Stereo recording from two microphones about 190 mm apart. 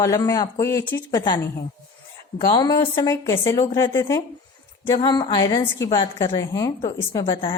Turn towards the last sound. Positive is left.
turn(degrees=25)  # may be behind; listen again after turning